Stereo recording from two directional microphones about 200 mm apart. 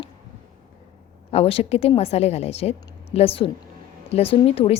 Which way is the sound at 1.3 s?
30° left (ahead or behind).